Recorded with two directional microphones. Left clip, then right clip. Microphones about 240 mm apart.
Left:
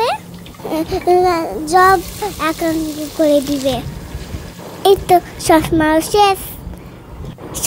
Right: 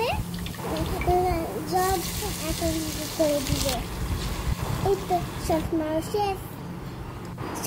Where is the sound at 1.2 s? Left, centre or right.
Left.